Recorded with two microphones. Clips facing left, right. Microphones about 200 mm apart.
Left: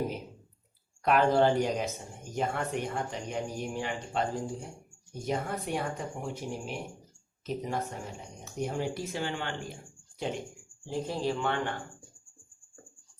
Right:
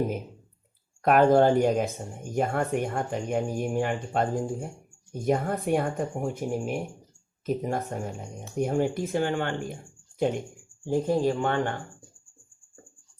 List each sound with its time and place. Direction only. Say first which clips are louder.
1.0 s speech: right 5 dB; 50° right (ahead or behind)